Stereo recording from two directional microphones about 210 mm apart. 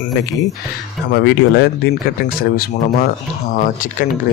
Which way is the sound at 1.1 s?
55° left (ahead or behind).